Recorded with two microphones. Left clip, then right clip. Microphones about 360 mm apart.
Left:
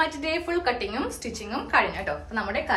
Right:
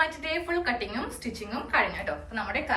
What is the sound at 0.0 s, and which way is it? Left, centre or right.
A woman's voice, centre.